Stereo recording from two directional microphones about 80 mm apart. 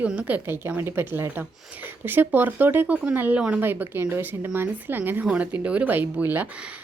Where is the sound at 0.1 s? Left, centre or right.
Centre.